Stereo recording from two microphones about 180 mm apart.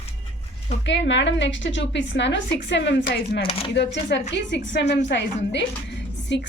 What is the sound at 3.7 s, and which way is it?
A woman's voice, 75° left (ahead or behind).